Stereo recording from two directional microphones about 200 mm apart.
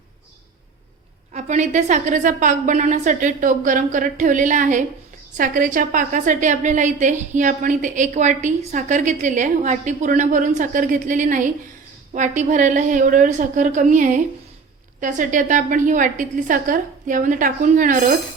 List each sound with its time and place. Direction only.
1.3 s a woman's voice: 35° right (ahead or behind)